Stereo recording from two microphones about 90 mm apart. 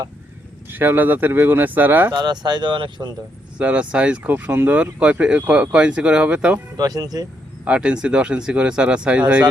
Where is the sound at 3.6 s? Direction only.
15° right (ahead or behind).